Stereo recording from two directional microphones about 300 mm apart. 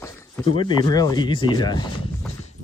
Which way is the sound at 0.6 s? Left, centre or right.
Centre.